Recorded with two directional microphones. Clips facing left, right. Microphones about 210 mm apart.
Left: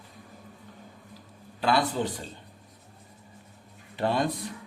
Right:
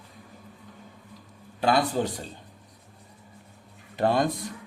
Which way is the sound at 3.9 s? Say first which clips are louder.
Right 3 dB; 45° right (ahead or behind).